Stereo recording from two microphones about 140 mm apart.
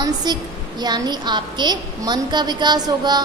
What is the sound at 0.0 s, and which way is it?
A woman's voice, 30° right (ahead or behind).